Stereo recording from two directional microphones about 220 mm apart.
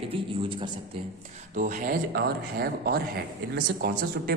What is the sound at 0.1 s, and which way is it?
Speech, 20° right (ahead or behind).